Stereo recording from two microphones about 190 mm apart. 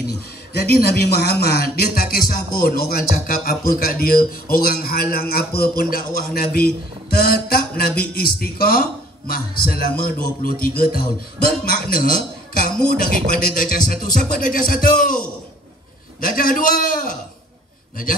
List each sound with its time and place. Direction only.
0.5 s speech: 55° left (ahead or behind)
13.3 s speech: 45° left (ahead or behind)